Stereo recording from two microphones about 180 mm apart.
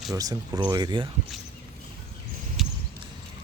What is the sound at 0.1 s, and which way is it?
Speech, 20° right (ahead or behind).